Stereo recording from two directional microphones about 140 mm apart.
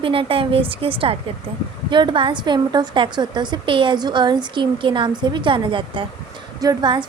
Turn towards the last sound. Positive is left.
turn(degrees=-35)  # may be behind; listen again after turning